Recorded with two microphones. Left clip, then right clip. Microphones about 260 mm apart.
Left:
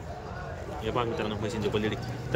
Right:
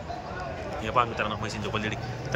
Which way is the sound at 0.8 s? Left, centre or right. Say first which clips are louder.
Right 4 dB; centre.